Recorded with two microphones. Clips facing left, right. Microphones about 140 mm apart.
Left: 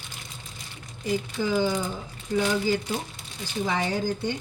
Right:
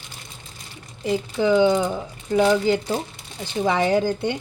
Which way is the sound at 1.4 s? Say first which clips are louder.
Right 9 dB; 65° right (ahead or behind).